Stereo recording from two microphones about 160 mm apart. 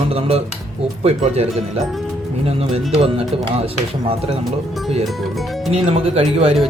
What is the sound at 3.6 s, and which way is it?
Speech, 35° right (ahead or behind).